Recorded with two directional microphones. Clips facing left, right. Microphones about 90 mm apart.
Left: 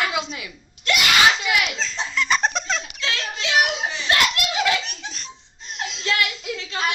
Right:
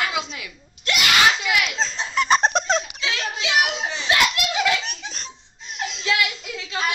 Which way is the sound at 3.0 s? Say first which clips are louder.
Right 1 dB; 5° right (ahead or behind).